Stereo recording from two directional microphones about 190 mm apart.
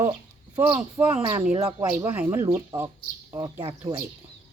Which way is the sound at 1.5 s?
30° right (ahead or behind).